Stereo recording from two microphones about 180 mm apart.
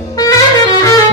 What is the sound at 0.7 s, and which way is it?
Music, 20° left (ahead or behind).